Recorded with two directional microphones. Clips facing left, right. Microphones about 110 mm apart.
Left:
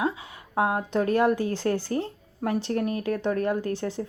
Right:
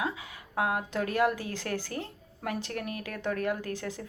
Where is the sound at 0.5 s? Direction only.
30° left (ahead or behind).